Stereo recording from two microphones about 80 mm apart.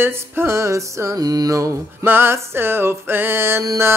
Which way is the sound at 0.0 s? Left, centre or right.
Right.